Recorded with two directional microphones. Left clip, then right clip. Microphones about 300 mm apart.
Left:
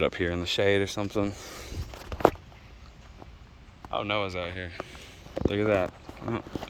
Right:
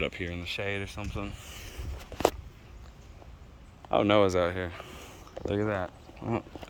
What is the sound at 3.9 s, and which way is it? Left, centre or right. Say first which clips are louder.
Speech: right 6 dB; right.